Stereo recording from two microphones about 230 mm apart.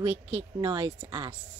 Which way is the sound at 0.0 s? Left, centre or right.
Right.